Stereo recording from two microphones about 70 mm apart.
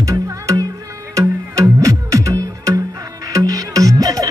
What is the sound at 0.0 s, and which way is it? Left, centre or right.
Music, right.